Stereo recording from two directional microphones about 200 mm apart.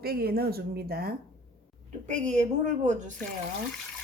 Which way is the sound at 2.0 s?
35° right (ahead or behind).